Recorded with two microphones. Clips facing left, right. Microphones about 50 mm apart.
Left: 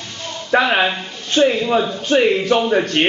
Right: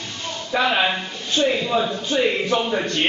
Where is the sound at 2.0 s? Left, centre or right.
Left.